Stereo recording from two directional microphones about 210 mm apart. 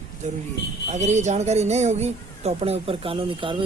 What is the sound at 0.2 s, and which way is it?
Speech, 35° right (ahead or behind).